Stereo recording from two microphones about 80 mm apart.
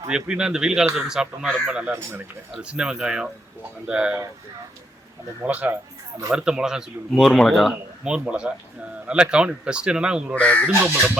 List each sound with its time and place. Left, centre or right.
0.1 s a man's voice: centre
5.4 s a man's voice: centre
8.0 s a man's voice: centre
10.3 s speech: centre
10.7 s speech: right